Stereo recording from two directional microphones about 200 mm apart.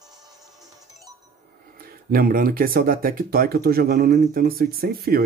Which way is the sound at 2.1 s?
45° right (ahead or behind).